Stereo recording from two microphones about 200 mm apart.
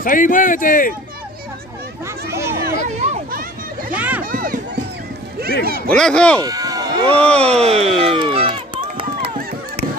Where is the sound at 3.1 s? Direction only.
45° right (ahead or behind).